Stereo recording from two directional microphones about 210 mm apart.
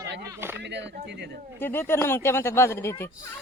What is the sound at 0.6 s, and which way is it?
Speech, 55° right (ahead or behind).